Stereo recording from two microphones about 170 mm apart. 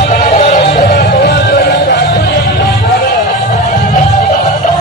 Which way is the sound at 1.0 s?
80° left.